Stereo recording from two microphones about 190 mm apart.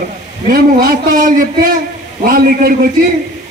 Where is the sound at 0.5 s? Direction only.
50° right (ahead or behind).